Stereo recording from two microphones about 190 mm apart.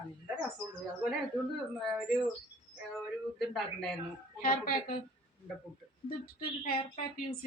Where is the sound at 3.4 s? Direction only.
Centre (ahead or behind).